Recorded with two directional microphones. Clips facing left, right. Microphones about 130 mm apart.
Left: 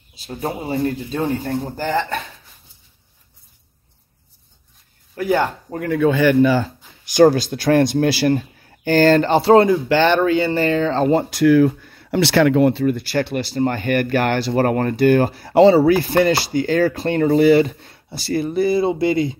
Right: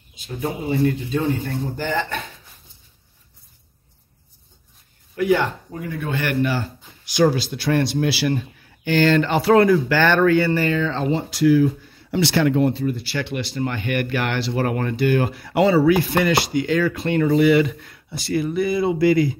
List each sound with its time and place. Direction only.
0.1 s speech: 40° left (ahead or behind)
5.1 s speech: 35° left (ahead or behind)
5.7 s speech: 65° left (ahead or behind)
7.1 s a man's voice: 45° left (ahead or behind); by 12.9 s 75° left (ahead or behind)
12.9 s speech: 45° left (ahead or behind); by 19.3 s 25° left (ahead or behind)